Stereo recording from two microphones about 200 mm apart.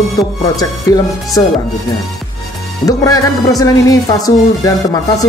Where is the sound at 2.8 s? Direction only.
15° left (ahead or behind).